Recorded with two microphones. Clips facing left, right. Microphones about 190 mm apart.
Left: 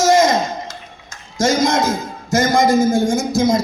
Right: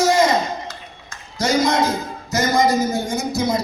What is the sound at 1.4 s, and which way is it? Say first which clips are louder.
A man's voice: left 2 dB; 45° left (ahead or behind).